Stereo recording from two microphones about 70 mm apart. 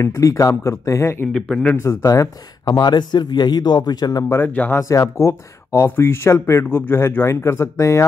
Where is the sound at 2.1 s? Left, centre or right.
Left.